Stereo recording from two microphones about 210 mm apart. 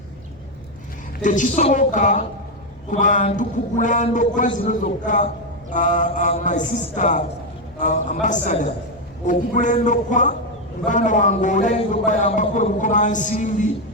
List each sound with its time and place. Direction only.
1.2 s a man's voice: 35° left (ahead or behind)